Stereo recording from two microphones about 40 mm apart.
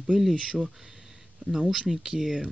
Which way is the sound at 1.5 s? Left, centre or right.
Centre.